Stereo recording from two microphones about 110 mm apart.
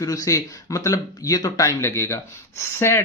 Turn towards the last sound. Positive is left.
turn(degrees=25)  # may be behind; listen again after turning